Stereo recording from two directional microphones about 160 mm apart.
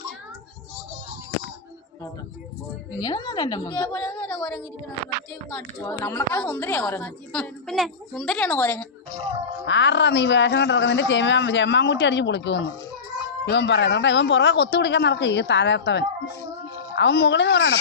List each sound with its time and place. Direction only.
3.0 s a woman's voice: 25° left (ahead or behind)
9.9 s speech: 90° left